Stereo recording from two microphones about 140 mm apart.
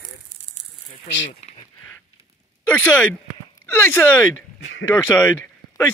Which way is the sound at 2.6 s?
10° left (ahead or behind).